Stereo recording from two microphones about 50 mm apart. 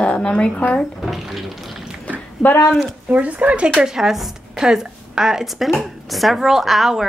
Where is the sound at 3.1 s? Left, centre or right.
Right.